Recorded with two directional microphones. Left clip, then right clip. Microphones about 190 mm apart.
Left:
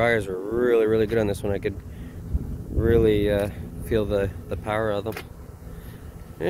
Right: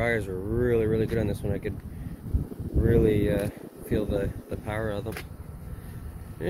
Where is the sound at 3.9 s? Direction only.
30° left (ahead or behind).